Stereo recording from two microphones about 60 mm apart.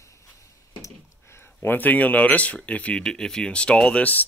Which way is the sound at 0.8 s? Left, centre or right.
Left.